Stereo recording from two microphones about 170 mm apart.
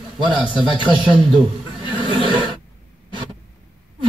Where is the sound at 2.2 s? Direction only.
30° right (ahead or behind).